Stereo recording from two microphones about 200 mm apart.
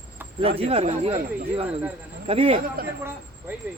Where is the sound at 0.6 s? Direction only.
30° right (ahead or behind).